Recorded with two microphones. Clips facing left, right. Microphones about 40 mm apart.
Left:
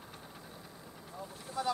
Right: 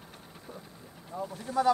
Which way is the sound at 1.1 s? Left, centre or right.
Right.